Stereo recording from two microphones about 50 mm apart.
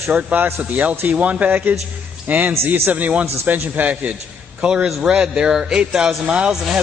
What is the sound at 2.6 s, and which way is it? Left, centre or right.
Speech, right.